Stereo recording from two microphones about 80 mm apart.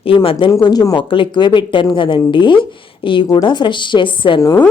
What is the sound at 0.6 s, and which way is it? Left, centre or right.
A woman's voice, left.